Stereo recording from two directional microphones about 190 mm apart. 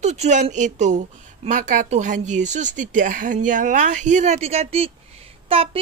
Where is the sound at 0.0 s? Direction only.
35° right (ahead or behind).